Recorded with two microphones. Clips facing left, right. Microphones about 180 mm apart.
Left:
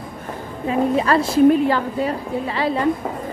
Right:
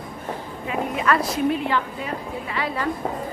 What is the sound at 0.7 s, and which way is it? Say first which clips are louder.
A woman's voice: left 5 dB; 30° left (ahead or behind).